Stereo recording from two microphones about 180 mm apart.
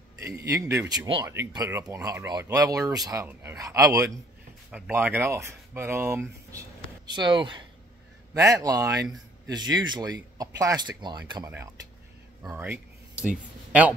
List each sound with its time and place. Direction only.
0.2 s speech: 15° right (ahead or behind)
4.6 s speech: 5° right (ahead or behind)
7.1 s speech: 25° right (ahead or behind)
12.4 s a sound: 10° right (ahead or behind)
13.7 s speech: 5° right (ahead or behind)